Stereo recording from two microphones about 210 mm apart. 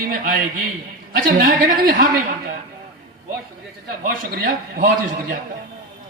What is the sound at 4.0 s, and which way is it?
A man's voice, 40° right (ahead or behind).